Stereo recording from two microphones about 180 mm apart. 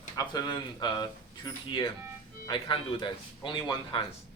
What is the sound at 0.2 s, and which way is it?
Speech, 20° left (ahead or behind).